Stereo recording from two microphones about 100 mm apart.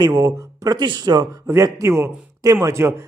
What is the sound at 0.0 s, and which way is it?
A man's voice, 35° right (ahead or behind).